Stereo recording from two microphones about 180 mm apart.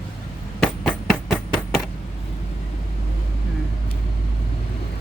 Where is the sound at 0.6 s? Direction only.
5° left (ahead or behind).